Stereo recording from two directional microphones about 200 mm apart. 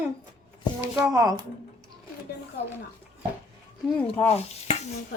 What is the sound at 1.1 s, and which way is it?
Speech, 20° right (ahead or behind).